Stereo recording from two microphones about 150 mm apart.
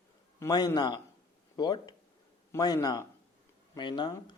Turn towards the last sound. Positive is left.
turn(degrees=30)  # may be behind; listen again after turning